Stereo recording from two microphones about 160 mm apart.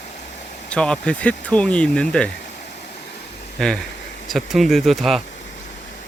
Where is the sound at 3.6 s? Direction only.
5° left (ahead or behind).